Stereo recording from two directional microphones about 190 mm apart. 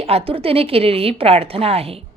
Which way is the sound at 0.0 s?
30° right (ahead or behind).